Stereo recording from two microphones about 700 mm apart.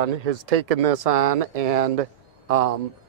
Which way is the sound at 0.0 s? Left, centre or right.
Right.